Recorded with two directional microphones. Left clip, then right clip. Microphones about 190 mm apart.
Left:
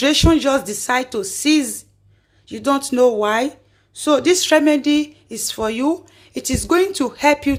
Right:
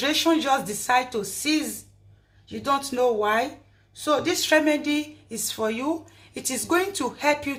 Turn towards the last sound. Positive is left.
turn(degrees=45)  # may be behind; listen again after turning